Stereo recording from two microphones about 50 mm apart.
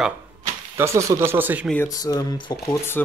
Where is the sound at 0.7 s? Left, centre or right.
Right.